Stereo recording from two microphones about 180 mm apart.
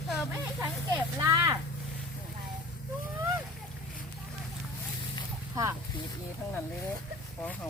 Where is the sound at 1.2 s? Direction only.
15° right (ahead or behind).